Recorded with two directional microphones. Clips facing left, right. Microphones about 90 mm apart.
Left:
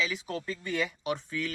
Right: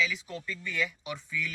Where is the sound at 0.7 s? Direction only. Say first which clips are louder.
Left 2 dB; 50° left (ahead or behind).